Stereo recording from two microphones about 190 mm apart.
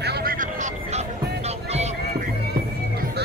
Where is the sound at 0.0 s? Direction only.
55° right (ahead or behind); by 2.0 s 35° right (ahead or behind).